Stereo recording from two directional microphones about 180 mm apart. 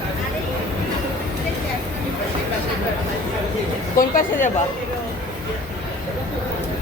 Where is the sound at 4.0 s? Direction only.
50° left (ahead or behind).